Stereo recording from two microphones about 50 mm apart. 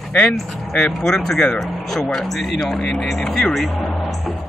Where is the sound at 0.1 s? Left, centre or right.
Centre.